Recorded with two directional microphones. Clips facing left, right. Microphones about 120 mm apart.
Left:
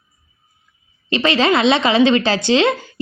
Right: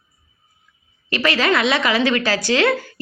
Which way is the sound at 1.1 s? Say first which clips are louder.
Left 3 dB; 25° left (ahead or behind).